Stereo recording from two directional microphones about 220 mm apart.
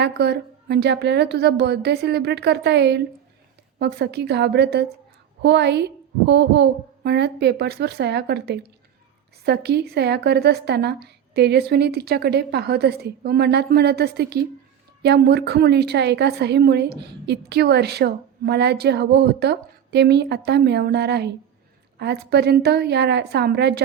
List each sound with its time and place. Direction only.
0.0 s a woman's voice: 50° right (ahead or behind)